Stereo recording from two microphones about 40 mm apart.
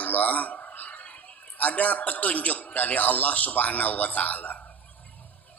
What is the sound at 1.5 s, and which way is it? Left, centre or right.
A man's voice, left.